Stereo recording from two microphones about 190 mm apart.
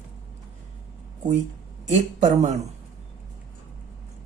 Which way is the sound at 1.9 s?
35° right (ahead or behind).